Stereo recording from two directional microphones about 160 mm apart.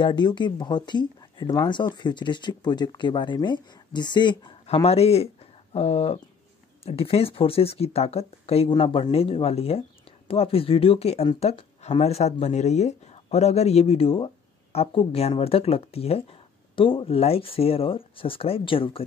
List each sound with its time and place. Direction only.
0.0 s speech: 30° left (ahead or behind)